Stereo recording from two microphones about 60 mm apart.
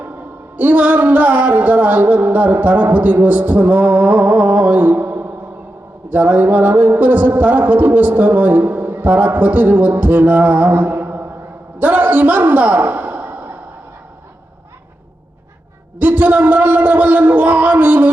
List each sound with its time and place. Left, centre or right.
0.5 s music: right
11.8 s a sound: right
16.0 s music: right